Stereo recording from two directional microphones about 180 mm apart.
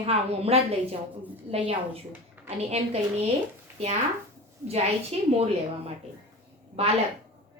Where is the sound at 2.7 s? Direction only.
35° right (ahead or behind).